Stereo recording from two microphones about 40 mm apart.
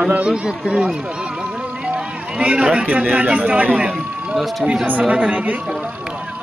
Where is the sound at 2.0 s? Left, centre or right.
Right.